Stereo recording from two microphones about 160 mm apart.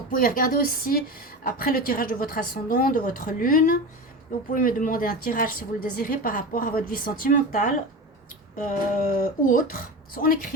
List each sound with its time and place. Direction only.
0.1 s a woman's voice: 60° left (ahead or behind)